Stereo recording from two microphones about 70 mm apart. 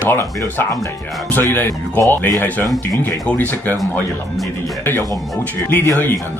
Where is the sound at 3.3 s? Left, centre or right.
Left.